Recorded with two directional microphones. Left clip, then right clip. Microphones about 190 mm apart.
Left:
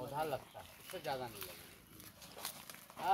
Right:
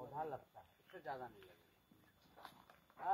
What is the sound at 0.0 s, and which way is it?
Chicken, 25° left (ahead or behind).